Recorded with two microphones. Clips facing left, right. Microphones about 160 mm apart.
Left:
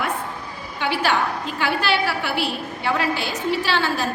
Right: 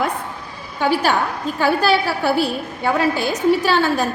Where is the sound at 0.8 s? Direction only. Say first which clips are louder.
Right 4 dB; 45° right (ahead or behind).